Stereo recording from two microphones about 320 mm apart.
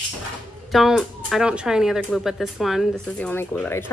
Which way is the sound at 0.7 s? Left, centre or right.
Centre.